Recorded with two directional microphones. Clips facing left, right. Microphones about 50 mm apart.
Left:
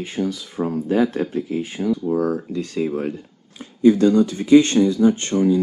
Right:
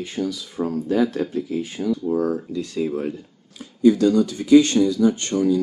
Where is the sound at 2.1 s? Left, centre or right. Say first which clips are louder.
Left 1 dB; left.